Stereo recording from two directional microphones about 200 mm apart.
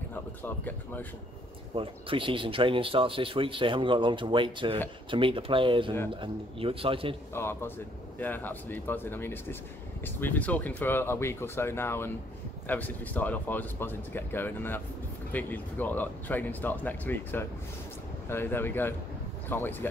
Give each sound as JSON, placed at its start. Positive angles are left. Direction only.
{"t": 0.1, "sound": "speech", "side_deg": 10}
{"t": 1.8, "sound": "speech", "side_deg": -25}
{"t": 7.3, "sound": "speech", "side_deg": 10}